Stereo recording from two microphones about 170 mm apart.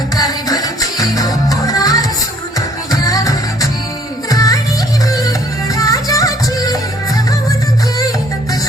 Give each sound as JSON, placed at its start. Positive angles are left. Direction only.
{"t": 0.2, "sound": "music", "side_deg": 20}